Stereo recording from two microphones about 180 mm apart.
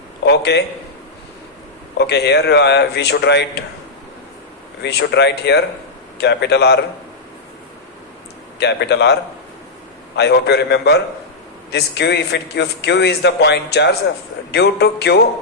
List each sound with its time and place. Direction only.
0.3 s a man's voice: 70° left (ahead or behind)
2.0 s a man's voice: 70° left (ahead or behind)
4.8 s a man's voice: 70° left (ahead or behind)
8.5 s a man's voice: 70° left (ahead or behind)
10.2 s a man's voice: 65° left (ahead or behind)